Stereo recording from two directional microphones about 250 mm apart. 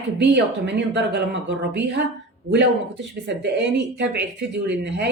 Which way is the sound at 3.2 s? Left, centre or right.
Right.